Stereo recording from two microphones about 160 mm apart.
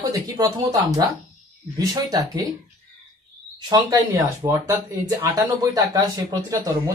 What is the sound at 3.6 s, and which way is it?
A man's voice, 25° right (ahead or behind).